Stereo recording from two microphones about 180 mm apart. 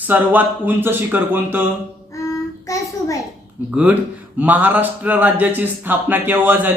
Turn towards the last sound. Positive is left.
turn(degrees=-10)  # may be behind; listen again after turning